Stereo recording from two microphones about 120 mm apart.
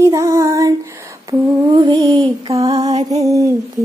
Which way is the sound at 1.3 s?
35° right (ahead or behind).